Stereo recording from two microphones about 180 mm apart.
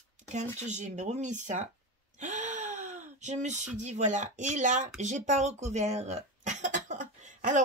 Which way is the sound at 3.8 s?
40° right (ahead or behind).